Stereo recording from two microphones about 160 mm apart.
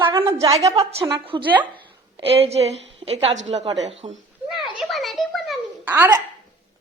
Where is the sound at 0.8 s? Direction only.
40° right (ahead or behind).